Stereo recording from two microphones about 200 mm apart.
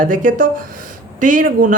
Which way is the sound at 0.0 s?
40° right (ahead or behind).